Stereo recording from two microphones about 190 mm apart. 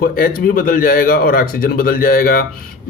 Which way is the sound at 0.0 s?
50° left (ahead or behind).